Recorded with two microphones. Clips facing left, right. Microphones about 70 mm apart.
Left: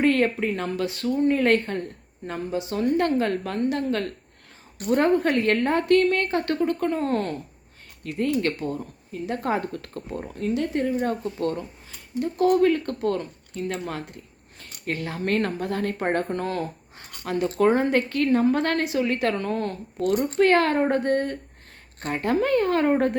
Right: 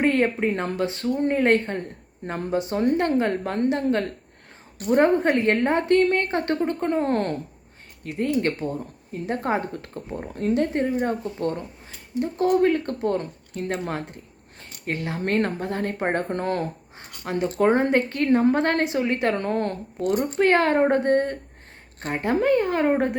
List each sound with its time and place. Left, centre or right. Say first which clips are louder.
0.0 s a woman's voice: even; right
2.2 s a woman's voice: right 3 dB; right
8.0 s a woman's voice: right 1 dB; right
10.3 s a woman's voice: right 3 dB; right
13.6 s a woman's voice: right 2 dB; right
16.3 s a woman's voice: right 2 dB; right
17.0 s a sound: even; right
17.7 s a woman's voice: right 2 dB; right
20.0 s a woman's voice: left 1 dB; centre